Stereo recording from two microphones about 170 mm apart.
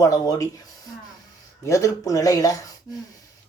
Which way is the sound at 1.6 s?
20° left (ahead or behind).